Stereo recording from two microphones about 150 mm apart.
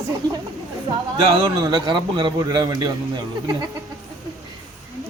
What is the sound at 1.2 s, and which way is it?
A man's voice, 25° right (ahead or behind).